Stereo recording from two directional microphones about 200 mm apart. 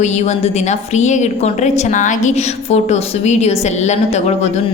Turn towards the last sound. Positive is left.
turn(degrees=35)  # may be behind; listen again after turning